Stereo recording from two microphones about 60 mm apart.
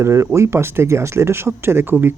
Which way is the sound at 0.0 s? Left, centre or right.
Right.